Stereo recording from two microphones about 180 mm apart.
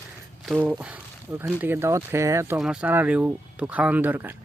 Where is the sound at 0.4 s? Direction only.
5° right (ahead or behind).